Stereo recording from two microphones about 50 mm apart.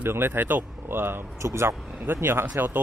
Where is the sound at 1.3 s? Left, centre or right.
Right.